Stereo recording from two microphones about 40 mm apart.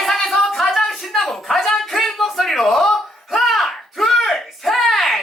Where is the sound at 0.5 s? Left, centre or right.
Centre.